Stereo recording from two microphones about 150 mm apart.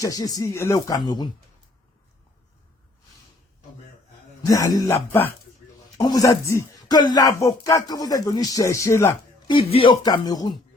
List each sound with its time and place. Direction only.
0.0 s speech: 20° left (ahead or behind)
4.4 s speech: 25° left (ahead or behind)
9.5 s speech: 35° left (ahead or behind)
10.0 s speech: 25° left (ahead or behind)